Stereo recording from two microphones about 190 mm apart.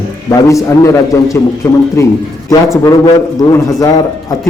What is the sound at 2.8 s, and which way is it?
A man's voice, 20° left (ahead or behind).